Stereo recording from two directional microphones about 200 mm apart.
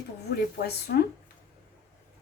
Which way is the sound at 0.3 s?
55° left (ahead or behind).